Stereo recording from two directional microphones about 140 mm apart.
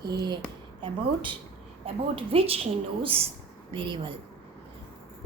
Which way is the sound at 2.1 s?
45° right (ahead or behind).